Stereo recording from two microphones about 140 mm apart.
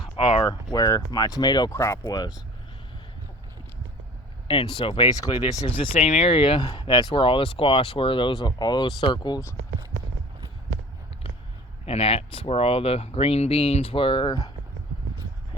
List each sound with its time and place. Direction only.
0.2 s speech: 40° left (ahead or behind)
0.4 s speech: 25° left (ahead or behind)
1.7 s speech: 20° left (ahead or behind)
4.4 s speech: 40° left (ahead or behind)
11.9 s speech: 45° left (ahead or behind)